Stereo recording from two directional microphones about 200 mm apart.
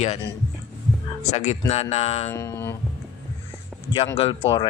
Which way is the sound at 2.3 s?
10° left (ahead or behind).